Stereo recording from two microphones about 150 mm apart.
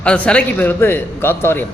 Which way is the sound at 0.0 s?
5° left (ahead or behind).